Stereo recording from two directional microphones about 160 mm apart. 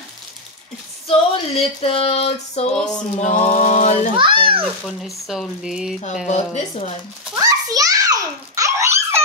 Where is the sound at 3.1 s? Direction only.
45° left (ahead or behind).